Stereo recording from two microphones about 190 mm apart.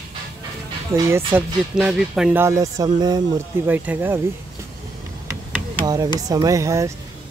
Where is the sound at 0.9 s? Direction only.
15° right (ahead or behind).